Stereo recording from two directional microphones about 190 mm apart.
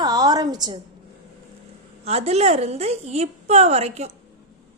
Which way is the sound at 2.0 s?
35° right (ahead or behind).